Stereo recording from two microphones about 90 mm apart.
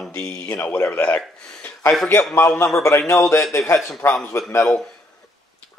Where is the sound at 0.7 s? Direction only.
30° left (ahead or behind).